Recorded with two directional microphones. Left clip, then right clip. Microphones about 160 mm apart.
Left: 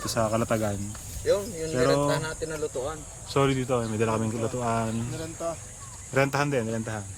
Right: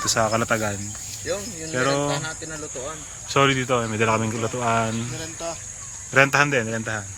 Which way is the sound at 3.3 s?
5° right (ahead or behind).